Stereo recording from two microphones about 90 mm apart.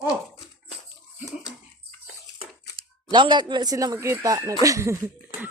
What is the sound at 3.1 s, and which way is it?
Speech, 60° right (ahead or behind).